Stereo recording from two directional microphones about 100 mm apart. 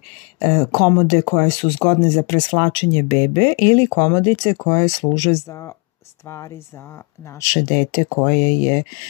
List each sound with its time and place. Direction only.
0.4 s speech: 45° left (ahead or behind); by 6.6 s 25° left (ahead or behind)
7.3 s speech: 40° left (ahead or behind)